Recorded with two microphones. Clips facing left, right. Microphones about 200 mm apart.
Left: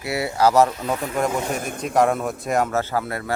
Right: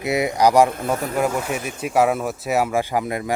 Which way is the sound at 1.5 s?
50° left (ahead or behind).